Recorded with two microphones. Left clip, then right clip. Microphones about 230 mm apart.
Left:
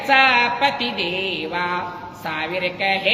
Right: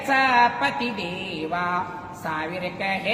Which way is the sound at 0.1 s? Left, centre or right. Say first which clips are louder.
Left 3 dB; centre.